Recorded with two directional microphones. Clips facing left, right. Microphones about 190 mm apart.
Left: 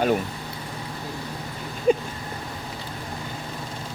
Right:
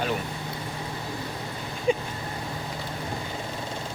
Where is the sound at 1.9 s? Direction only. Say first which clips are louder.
Left 4 dB; 45° left (ahead or behind).